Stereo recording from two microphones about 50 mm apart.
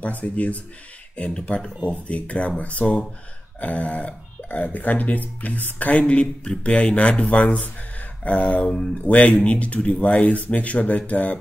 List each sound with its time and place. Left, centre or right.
0.0 s speech: left